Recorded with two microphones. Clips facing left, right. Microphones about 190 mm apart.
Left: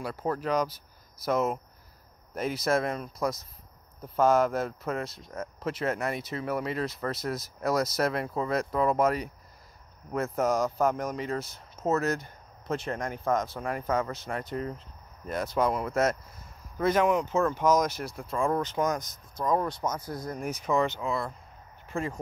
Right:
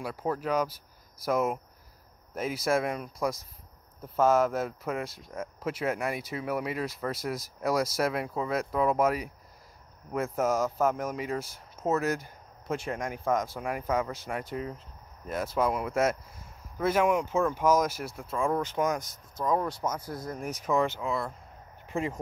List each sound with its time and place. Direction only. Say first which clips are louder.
0.0 s speech: left 1 dB; 10° right (ahead or behind)
21.8 s speech: right 1 dB; 20° right (ahead or behind)